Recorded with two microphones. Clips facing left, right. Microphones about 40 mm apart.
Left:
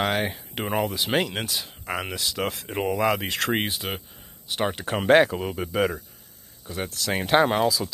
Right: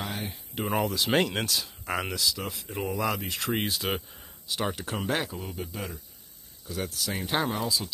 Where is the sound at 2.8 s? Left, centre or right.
Left.